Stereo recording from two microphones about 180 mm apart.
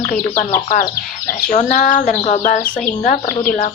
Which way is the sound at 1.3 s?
50° left (ahead or behind).